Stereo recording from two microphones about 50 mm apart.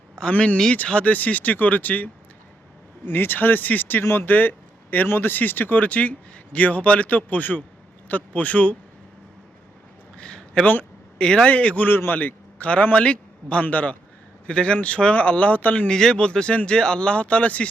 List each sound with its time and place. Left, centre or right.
0.3 s speech: left
3.1 s speech: left
4.0 s a man's voice: left
4.3 s speech: left
10.2 s a sound: centre
11.2 s speech: centre
11.9 s a man's voice: left
12.2 s a man's voice: left
15.9 s speech: centre